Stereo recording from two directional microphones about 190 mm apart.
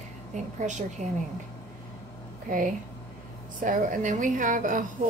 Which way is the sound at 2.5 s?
45° right (ahead or behind).